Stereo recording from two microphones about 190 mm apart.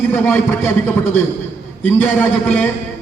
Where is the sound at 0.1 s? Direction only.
10° left (ahead or behind).